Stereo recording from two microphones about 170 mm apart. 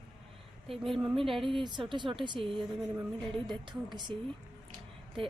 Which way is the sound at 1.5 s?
30° right (ahead or behind).